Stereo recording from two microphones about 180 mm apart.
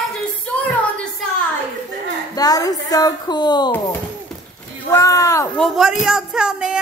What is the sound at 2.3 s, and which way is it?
A woman's voice, 20° left (ahead or behind).